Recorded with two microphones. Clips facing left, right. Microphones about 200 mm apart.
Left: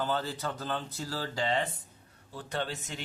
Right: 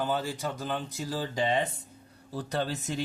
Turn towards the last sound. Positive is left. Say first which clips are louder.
# right 4 dB
turn(degrees=-40)  # may be behind; listen again after turning